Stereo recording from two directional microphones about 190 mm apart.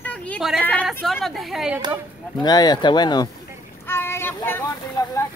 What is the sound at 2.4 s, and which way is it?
Speech, 20° left (ahead or behind).